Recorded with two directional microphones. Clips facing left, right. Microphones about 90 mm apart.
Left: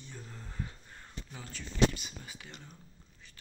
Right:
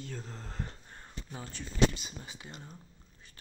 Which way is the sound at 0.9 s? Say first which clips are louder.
Right 2 dB; 30° right (ahead or behind).